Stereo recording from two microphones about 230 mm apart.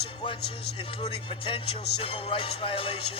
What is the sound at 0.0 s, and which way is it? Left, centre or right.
Speech, left.